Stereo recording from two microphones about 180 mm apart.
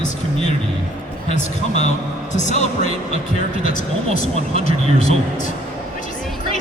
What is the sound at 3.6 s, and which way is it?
Speech, 45° left (ahead or behind).